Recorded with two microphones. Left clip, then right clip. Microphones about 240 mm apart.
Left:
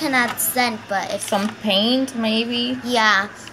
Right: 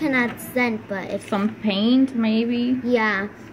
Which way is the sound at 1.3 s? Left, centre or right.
Left.